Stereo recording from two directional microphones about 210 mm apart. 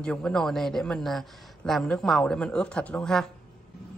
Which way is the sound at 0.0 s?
5° left (ahead or behind).